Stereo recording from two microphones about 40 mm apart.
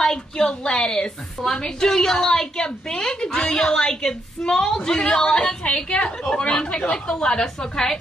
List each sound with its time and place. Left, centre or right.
0.0 s a woman's voice: centre